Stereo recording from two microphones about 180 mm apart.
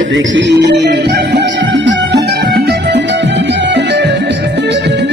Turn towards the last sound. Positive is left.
turn(degrees=-75)  # may be behind; listen again after turning